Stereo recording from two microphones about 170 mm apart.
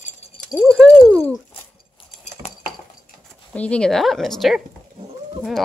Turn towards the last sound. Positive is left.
turn(degrees=0)  # may be behind; listen again after turning